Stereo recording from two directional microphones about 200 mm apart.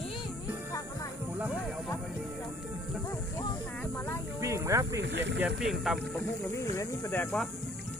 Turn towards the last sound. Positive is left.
turn(degrees=10)  # may be behind; listen again after turning